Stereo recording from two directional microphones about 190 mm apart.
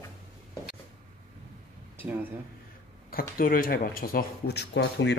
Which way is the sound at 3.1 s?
50° left (ahead or behind).